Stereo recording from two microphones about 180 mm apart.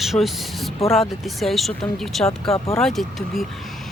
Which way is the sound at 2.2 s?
35° left (ahead or behind).